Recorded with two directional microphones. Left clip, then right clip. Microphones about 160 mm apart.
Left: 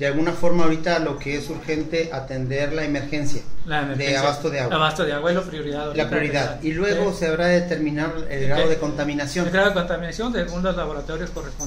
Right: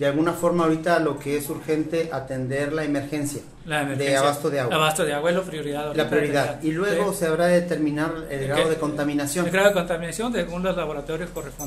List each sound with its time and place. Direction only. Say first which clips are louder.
0.0 s a man's voice: even; 25° right (ahead or behind)
2.5 s a man's voice: left 1 dB; 30° right (ahead or behind)
4.6 s a man's voice: left 1 dB; 10° right (ahead or behind)
5.9 s a man's voice: right 1 dB; 25° right (ahead or behind)
9.5 s a man's voice: even; 15° right (ahead or behind)